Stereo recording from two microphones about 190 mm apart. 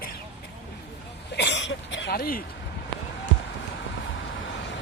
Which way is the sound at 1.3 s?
65° left (ahead or behind).